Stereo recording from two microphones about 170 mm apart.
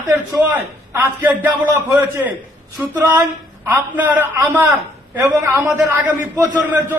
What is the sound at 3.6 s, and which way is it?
A man's voice, 15° right (ahead or behind).